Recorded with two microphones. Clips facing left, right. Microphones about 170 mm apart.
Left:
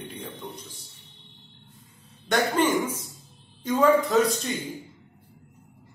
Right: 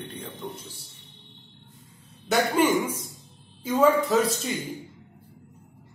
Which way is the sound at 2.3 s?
10° right (ahead or behind).